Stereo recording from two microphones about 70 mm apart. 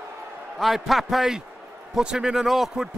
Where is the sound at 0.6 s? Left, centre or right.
Centre.